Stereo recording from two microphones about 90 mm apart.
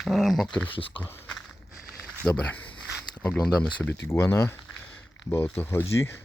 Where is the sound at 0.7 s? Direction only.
75° left (ahead or behind).